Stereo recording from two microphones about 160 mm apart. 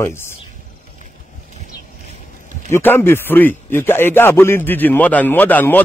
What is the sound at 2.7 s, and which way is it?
A man's voice, 15° left (ahead or behind).